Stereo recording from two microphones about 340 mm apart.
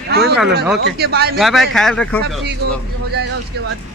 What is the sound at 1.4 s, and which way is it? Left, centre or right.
Speech, centre.